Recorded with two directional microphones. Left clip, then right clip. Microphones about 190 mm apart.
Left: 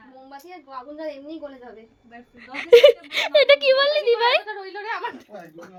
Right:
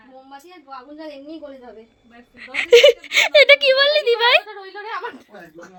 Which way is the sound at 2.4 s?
Centre (ahead or behind).